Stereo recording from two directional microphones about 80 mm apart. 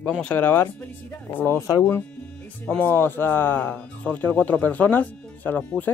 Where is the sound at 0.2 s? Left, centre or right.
Left.